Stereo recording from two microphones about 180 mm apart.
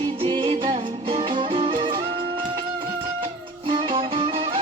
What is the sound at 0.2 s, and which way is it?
Music, 30° right (ahead or behind).